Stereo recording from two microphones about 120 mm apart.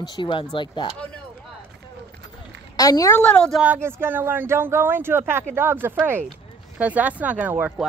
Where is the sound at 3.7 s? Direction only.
20° right (ahead or behind).